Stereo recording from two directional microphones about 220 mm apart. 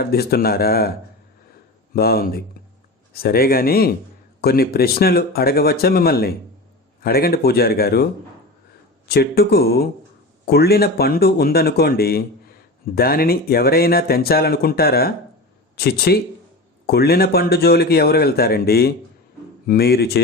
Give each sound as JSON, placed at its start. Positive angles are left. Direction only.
{"t": 0.1, "sound": "speech", "side_deg": 45}
{"t": 9.0, "sound": "speech", "side_deg": 45}